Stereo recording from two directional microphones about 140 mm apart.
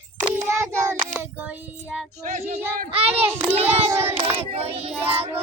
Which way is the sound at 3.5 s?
45° right (ahead or behind).